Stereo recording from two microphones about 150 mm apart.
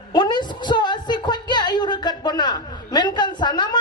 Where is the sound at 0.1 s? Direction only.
30° left (ahead or behind).